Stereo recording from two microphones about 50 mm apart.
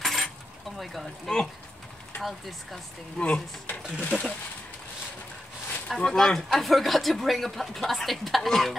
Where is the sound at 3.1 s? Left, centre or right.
Left.